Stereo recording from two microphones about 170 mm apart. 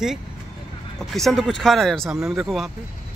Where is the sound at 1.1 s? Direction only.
Centre (ahead or behind).